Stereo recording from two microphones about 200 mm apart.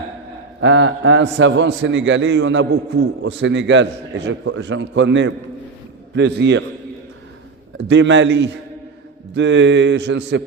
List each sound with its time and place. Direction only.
0.6 s a man's voice: 65° right (ahead or behind)
7.9 s a man's voice: 65° right (ahead or behind)